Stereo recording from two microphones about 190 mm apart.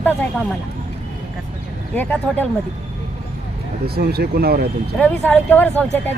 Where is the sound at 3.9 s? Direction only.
55° right (ahead or behind).